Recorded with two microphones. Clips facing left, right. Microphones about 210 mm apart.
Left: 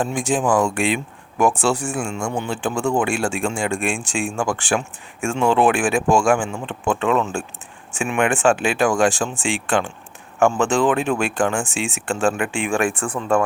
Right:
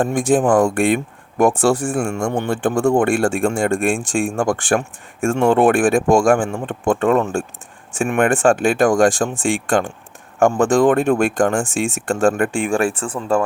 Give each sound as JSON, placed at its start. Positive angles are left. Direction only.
{"t": 0.0, "sound": "speech", "side_deg": -60}
{"t": 12.7, "sound": "speech", "side_deg": -35}